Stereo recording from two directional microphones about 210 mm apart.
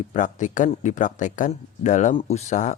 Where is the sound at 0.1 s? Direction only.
35° left (ahead or behind).